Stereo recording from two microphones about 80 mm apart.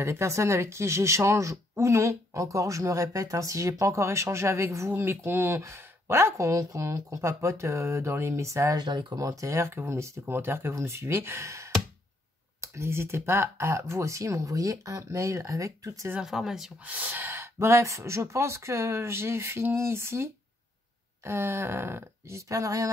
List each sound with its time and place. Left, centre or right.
0.0 s speech: right
8.7 s speech: right
12.7 s speech: right
16.2 s speech: centre
16.8 s speech: right